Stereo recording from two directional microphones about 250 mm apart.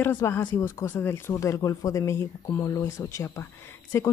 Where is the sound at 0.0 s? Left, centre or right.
Centre.